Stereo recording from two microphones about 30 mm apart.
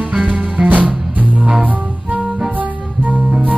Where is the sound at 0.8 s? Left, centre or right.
Right.